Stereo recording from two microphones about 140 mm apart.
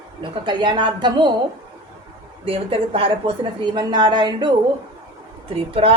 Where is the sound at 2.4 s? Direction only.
40° right (ahead or behind).